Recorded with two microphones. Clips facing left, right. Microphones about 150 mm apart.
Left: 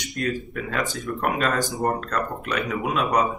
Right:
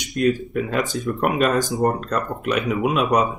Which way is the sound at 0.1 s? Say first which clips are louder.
Right 8 dB; 20° right (ahead or behind).